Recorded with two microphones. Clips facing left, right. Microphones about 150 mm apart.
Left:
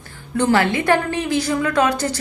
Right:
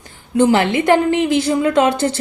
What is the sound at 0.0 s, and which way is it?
Speech, 20° right (ahead or behind).